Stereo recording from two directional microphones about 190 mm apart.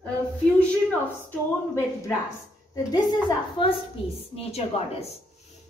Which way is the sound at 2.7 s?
20° left (ahead or behind).